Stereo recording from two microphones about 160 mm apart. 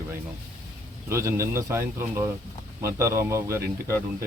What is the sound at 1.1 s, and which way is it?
Speech, 15° right (ahead or behind).